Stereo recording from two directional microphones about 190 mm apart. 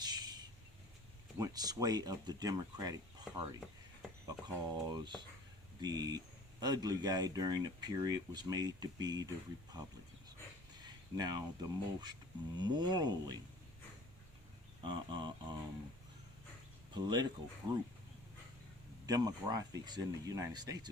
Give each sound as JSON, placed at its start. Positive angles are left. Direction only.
{"t": 0.0, "sound": "vehicle", "side_deg": -20}
{"t": 1.4, "sound": "speech", "side_deg": -20}
{"t": 10.8, "sound": "speech", "side_deg": -20}
{"t": 14.8, "sound": "speech", "side_deg": -25}
{"t": 16.9, "sound": "speech", "side_deg": -20}
{"t": 19.0, "sound": "speech", "side_deg": -20}